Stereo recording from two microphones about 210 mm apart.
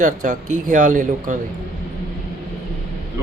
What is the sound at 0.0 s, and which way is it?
Speech, 40° right (ahead or behind).